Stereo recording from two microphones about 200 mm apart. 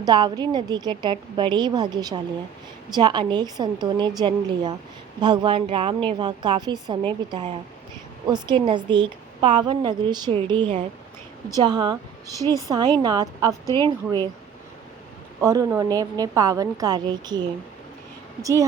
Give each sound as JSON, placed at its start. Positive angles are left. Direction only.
{"t": 0.0, "sound": "a woman's voice", "side_deg": -20}
{"t": 15.4, "sound": "a woman's voice", "side_deg": -15}